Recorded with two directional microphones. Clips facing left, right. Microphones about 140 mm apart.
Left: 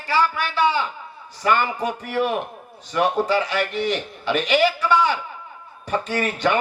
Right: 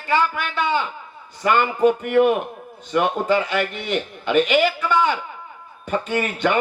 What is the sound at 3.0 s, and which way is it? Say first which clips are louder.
Speech: right 1 dB; 35° left (ahead or behind).